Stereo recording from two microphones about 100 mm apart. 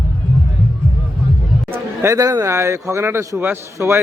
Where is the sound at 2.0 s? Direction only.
35° right (ahead or behind).